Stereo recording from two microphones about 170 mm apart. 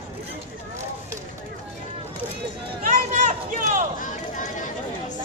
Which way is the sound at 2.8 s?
50° right (ahead or behind).